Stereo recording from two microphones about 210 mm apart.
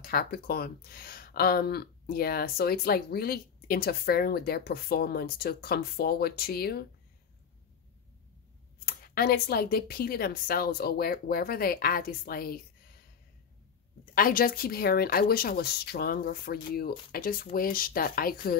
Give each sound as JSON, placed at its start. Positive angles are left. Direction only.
{"t": 0.0, "sound": "speech", "side_deg": 45}
{"t": 8.7, "sound": "speech", "side_deg": 45}
{"t": 14.1, "sound": "speech", "side_deg": 45}